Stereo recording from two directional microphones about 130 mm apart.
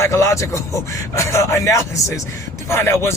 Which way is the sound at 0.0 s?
20° left (ahead or behind).